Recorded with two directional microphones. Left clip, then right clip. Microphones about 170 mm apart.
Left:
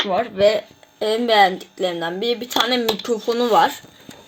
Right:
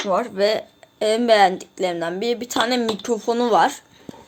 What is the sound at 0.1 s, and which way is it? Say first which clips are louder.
Speech: left 1 dB; 30° right (ahead or behind).